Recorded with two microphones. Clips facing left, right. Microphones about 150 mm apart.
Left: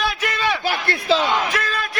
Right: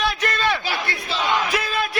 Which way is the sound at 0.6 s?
55° left (ahead or behind).